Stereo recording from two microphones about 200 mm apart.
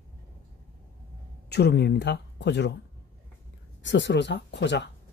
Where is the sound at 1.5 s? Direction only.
55° left (ahead or behind).